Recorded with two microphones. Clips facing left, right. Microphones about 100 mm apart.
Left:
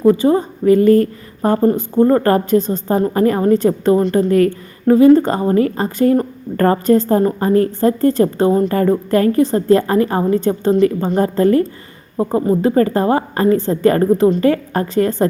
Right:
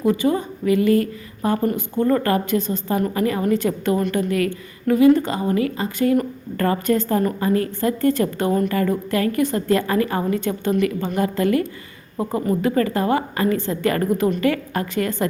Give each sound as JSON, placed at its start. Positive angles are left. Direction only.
{"t": 0.0, "sound": "a woman's voice", "side_deg": 35}
{"t": 8.7, "sound": "a woman's voice", "side_deg": 40}